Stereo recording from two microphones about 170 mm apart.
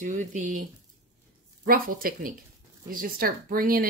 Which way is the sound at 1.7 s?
60° right (ahead or behind).